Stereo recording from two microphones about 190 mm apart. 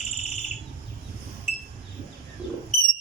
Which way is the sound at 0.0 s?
40° left (ahead or behind).